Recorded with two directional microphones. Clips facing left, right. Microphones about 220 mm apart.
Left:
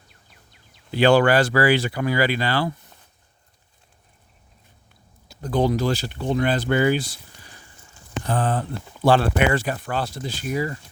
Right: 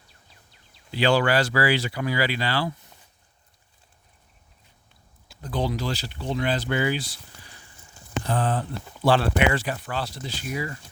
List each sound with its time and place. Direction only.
0.9 s speech: 50° left (ahead or behind)
5.3 s speech: 45° left (ahead or behind)
8.3 s speech: 50° left (ahead or behind)